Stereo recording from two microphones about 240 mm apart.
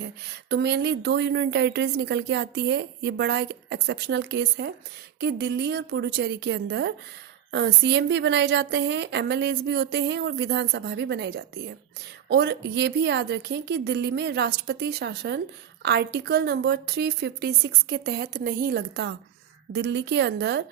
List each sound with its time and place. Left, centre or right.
0.5 s speech: right